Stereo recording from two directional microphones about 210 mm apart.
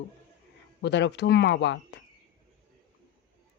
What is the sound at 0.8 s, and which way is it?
Speech, 55° left (ahead or behind).